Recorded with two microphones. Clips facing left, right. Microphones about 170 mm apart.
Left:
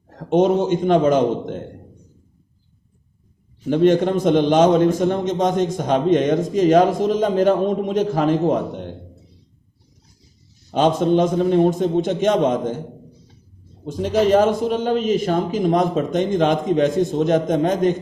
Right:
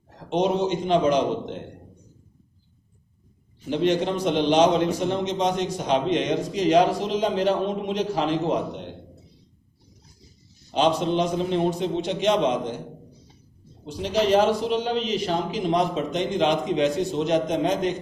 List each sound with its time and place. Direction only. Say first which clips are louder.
0.2 s a man's voice: left 6 dB; 50° left (ahead or behind)
3.7 s a man's voice: left 7 dB; 50° left (ahead or behind)
10.7 s a man's voice: left 5 dB; 50° left (ahead or behind)
13.8 s a man's voice: left 5 dB; 50° left (ahead or behind)